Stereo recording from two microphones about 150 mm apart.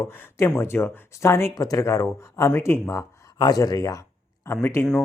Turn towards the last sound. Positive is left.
turn(degrees=15)  # may be behind; listen again after turning